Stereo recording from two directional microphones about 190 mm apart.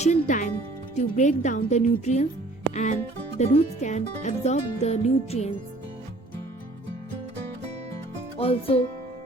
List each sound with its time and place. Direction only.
0.0 s music: 40° left (ahead or behind)
0.9 s speech: 40° left (ahead or behind)
8.4 s speech: 30° left (ahead or behind)